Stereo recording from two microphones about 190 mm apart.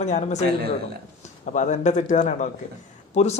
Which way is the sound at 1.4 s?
40° left (ahead or behind).